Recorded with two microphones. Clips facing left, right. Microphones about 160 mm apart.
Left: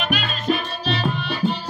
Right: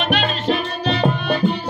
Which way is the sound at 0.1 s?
75° right (ahead or behind).